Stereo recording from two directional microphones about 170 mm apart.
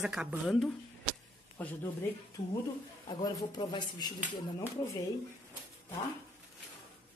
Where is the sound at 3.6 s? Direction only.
25° left (ahead or behind).